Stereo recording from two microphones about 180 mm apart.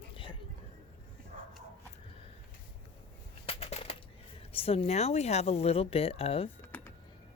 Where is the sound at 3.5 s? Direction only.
35° left (ahead or behind).